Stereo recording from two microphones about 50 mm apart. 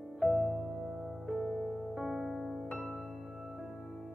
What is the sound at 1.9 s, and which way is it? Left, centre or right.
Music, centre.